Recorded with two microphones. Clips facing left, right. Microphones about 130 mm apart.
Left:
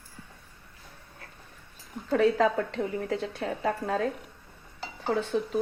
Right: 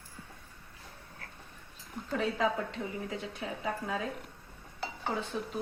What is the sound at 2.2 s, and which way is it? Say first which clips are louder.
A woman's voice: left 7 dB; 70° left (ahead or behind).